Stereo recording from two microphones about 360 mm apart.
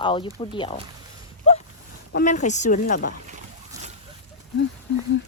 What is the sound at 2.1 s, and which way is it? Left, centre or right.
Speech, left.